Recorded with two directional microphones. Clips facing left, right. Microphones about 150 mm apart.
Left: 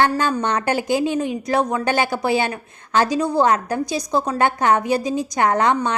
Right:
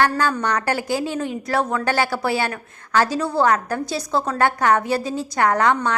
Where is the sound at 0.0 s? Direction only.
20° left (ahead or behind).